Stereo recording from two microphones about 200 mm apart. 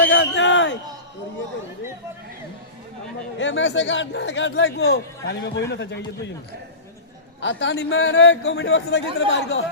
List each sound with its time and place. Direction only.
0.0 s a sound: 70° left (ahead or behind)
3.3 s a man's voice: 65° left (ahead or behind)
7.4 s a man's voice: 65° left (ahead or behind)